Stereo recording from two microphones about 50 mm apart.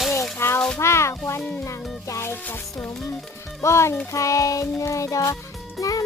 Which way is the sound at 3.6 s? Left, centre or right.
Left.